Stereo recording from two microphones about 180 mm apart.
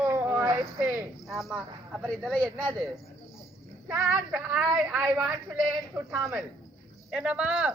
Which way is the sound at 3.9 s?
10° right (ahead or behind).